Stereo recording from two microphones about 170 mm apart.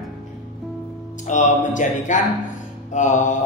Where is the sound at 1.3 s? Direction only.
45° left (ahead or behind).